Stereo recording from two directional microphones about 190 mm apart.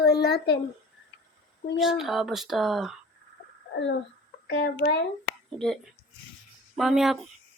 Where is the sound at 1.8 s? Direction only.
Centre (ahead or behind).